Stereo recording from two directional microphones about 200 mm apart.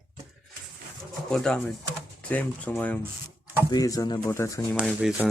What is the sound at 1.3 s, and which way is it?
Speech, 5° left (ahead or behind).